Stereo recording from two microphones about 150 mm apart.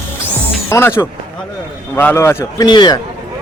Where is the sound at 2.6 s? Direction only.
30° left (ahead or behind).